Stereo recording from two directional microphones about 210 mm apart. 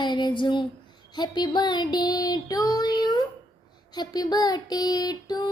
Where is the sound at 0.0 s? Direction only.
20° left (ahead or behind).